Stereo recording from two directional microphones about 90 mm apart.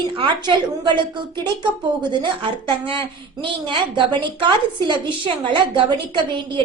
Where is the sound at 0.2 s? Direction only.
60° right (ahead or behind).